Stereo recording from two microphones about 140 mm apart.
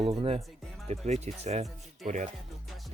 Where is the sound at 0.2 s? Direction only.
45° right (ahead or behind).